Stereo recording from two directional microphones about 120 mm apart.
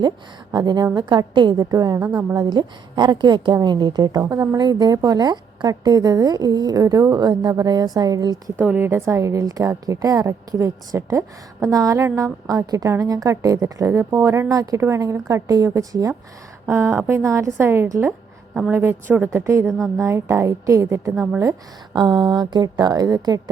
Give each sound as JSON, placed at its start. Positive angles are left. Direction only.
{"t": 0.5, "sound": "a woman's voice", "side_deg": -35}
{"t": 8.5, "sound": "a woman's voice", "side_deg": -20}
{"t": 21.9, "sound": "a woman's voice", "side_deg": -40}